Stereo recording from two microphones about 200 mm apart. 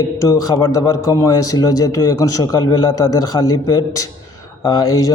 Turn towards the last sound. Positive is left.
turn(degrees=20)  # may be behind; listen again after turning